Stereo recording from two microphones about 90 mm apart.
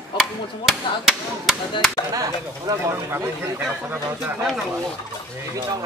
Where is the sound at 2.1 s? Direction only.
40° right (ahead or behind).